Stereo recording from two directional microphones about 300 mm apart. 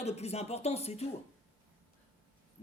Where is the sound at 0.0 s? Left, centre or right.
Left.